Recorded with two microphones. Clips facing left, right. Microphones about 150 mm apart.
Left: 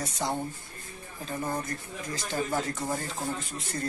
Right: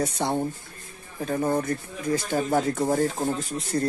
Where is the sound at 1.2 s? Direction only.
60° right (ahead or behind).